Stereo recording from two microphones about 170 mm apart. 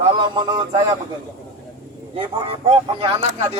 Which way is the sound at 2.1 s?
30° right (ahead or behind).